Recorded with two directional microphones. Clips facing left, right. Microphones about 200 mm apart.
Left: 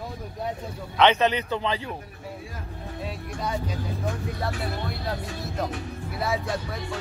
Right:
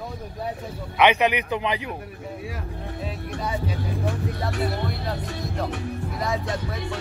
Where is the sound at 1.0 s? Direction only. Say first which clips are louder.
Right 1 dB; 15° right (ahead or behind).